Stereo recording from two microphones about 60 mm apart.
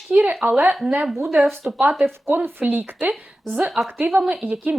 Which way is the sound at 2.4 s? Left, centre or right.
Right.